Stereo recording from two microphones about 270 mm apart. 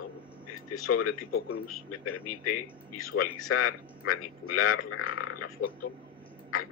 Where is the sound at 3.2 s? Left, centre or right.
Left.